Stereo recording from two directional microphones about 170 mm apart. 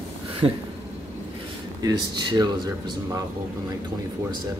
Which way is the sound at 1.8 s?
25° right (ahead or behind).